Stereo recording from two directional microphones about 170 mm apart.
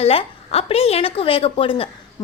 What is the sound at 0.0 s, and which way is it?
A woman's voice, 35° left (ahead or behind).